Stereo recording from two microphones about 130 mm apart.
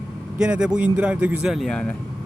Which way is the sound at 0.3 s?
5° right (ahead or behind).